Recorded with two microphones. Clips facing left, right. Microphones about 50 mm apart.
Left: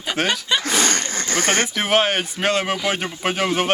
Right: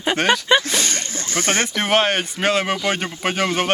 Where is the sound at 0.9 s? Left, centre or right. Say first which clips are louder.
Left 4 dB; left.